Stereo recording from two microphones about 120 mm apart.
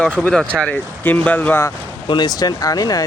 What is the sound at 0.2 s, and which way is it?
Speech, 10° left (ahead or behind).